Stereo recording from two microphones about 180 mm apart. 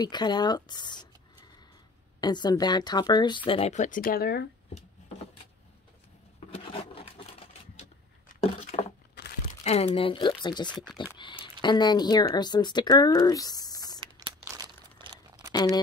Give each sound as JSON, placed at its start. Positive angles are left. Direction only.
{"t": 0.0, "sound": "speech", "side_deg": 25}
{"t": 2.1, "sound": "speech", "side_deg": 25}
{"t": 6.5, "sound": "a sound", "side_deg": 30}
{"t": 9.6, "sound": "speech", "side_deg": 35}
{"t": 14.4, "sound": "crumpling", "side_deg": -15}
{"t": 15.0, "sound": "a sound", "side_deg": -25}